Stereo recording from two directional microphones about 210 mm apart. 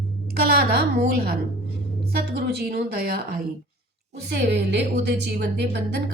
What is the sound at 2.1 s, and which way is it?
A woman's voice, 50° right (ahead or behind).